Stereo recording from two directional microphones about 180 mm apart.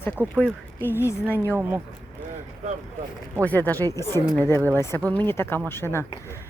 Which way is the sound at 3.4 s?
10° left (ahead or behind).